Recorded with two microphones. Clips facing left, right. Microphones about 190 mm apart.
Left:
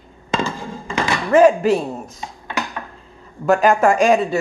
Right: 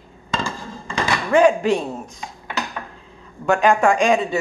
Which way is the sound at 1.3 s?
5° left (ahead or behind).